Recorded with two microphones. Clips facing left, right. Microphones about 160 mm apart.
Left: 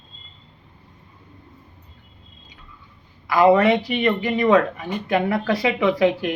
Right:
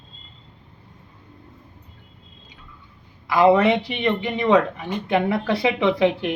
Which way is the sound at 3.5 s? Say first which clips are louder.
Left 1 dB; 20° right (ahead or behind).